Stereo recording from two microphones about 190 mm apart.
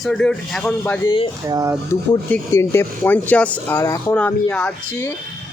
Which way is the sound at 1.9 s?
15° left (ahead or behind).